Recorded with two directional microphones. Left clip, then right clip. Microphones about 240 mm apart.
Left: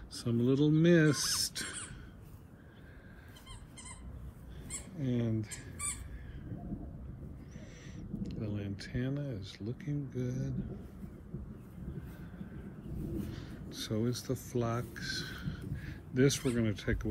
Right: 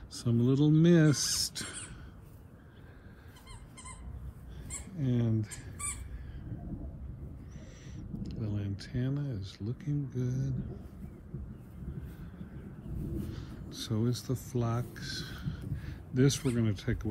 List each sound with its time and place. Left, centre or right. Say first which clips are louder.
0.1 s speech: right 1 dB; centre
4.9 s speech: right 2 dB; centre
7.5 s a sound: left 1 dB; centre
13.0 s crow: even; centre
16.5 s speech: even; centre